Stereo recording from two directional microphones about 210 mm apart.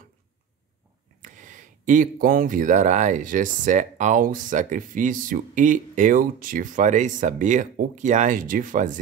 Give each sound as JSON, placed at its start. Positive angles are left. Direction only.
{"t": 1.2, "sound": "speech", "side_deg": -40}